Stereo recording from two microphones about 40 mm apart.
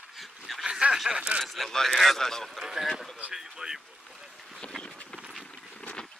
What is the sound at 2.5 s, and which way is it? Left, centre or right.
Speech, centre.